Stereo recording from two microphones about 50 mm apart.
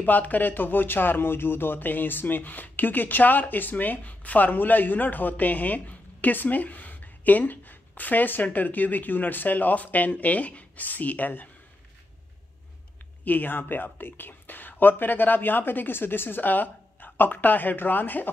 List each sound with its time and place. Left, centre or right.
0.0 s speech: left
13.2 s speech: left